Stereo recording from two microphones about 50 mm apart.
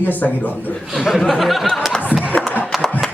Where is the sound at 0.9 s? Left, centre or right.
Centre.